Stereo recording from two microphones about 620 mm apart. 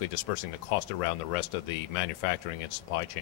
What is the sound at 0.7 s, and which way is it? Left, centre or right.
Speech, left.